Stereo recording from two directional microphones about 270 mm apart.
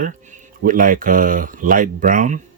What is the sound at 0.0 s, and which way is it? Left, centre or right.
Speech, right.